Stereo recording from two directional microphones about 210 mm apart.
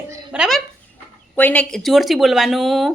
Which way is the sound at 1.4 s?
5° left (ahead or behind).